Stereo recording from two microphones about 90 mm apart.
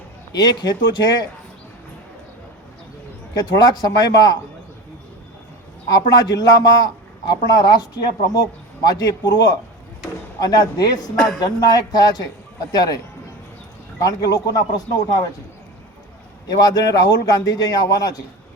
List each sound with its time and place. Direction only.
0.3 s a man's voice: 50° left (ahead or behind)
3.3 s a man's voice: 50° left (ahead or behind)
5.9 s a man's voice: 45° left (ahead or behind)
14.0 s a man's voice: 45° left (ahead or behind)
16.5 s a man's voice: 45° left (ahead or behind)